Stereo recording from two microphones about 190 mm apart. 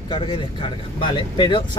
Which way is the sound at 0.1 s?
25° left (ahead or behind).